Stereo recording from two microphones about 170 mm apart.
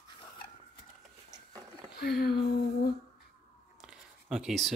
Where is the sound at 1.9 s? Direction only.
65° left (ahead or behind).